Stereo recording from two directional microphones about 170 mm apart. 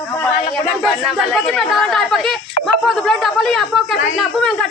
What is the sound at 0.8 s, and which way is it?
Speech, centre (ahead or behind).